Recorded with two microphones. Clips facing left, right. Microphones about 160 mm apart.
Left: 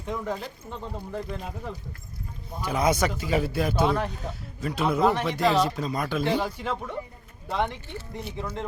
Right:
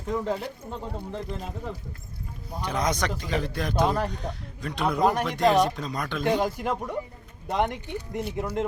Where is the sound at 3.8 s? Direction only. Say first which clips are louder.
Right 1 dB; 40° right (ahead or behind).